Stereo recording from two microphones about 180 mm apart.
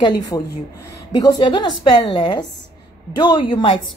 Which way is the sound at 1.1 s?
20° left (ahead or behind).